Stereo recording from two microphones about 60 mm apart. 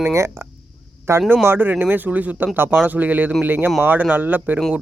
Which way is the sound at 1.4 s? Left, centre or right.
Right.